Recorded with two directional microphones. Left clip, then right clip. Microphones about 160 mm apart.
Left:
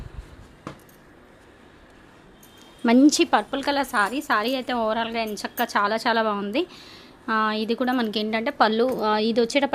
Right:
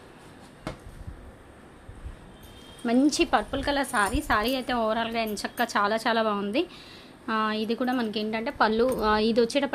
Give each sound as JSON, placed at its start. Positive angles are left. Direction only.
{"t": 2.8, "sound": "a woman's voice", "side_deg": 40}
{"t": 3.1, "sound": "a woman's voice", "side_deg": 20}
{"t": 9.0, "sound": "a woman's voice", "side_deg": 10}